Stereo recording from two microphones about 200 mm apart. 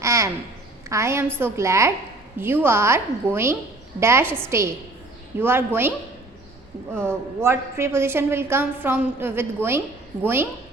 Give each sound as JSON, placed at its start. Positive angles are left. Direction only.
{"t": 0.0, "sound": "a sound", "side_deg": -15}
{"t": 0.9, "sound": "a woman's voice", "side_deg": -15}
{"t": 7.0, "sound": "a woman's voice", "side_deg": -10}